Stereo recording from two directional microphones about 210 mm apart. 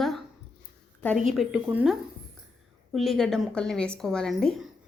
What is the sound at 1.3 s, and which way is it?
A woman's voice, centre (ahead or behind).